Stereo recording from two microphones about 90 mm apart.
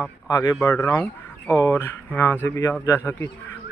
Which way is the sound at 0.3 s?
35° left (ahead or behind).